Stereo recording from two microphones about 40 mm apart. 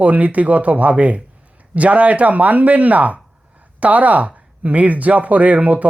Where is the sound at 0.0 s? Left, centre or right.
Right.